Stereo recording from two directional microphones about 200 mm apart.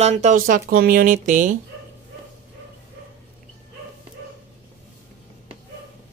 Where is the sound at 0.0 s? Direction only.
35° right (ahead or behind).